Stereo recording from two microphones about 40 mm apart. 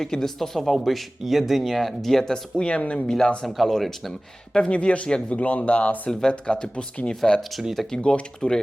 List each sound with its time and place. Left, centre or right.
0.0 s speech: centre
2.6 s speech: left
3.1 s speech: centre
3.4 s speech: centre
4.5 s speech: left
5.3 s speech: left
6.1 s speech: centre
6.6 s speech: left
7.8 s speech: centre
8.1 s speech: centre